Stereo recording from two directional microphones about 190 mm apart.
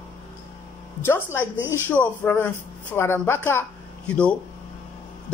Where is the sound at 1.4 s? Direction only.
10° right (ahead or behind).